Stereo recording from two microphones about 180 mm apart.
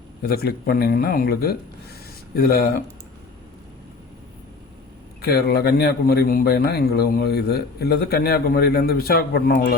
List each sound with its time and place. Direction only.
0.3 s a man's voice: 60° left (ahead or behind)
5.2 s a man's voice: 60° left (ahead or behind)